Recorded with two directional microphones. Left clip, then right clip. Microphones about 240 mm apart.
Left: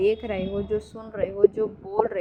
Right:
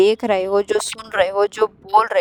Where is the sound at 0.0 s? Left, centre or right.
Right.